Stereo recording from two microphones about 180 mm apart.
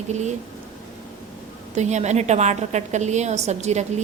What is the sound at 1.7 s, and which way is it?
A woman's voice, 40° right (ahead or behind).